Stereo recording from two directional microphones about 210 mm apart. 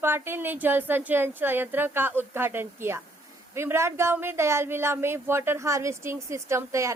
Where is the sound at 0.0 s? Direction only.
10° right (ahead or behind).